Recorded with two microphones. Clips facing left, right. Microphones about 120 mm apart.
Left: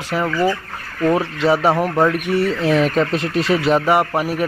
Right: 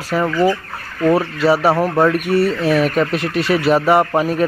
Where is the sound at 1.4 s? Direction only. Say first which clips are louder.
Right 2 dB; 20° left (ahead or behind).